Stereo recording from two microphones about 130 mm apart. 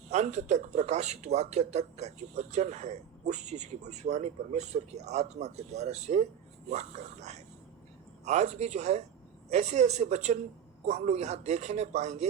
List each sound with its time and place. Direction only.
0.1 s speech: 60° right (ahead or behind)